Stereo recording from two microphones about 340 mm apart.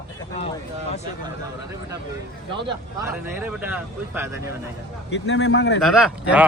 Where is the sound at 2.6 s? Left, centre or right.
Centre.